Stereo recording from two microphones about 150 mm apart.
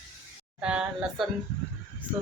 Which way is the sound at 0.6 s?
5° right (ahead or behind).